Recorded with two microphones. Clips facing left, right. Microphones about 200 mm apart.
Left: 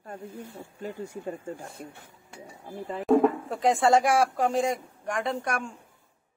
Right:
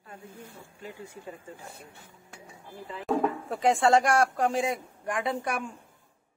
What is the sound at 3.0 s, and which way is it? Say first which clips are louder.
Speech: left 6 dB; centre (ahead or behind).